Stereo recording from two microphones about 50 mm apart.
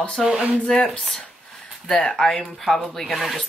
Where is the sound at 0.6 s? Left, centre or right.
Centre.